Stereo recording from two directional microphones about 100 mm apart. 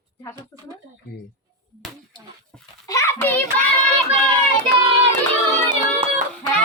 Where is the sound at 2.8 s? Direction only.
30° left (ahead or behind).